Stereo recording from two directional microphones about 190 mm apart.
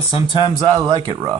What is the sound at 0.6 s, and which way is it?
Speech, 30° right (ahead or behind).